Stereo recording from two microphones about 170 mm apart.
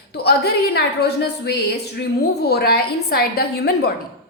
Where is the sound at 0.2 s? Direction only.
70° left (ahead or behind).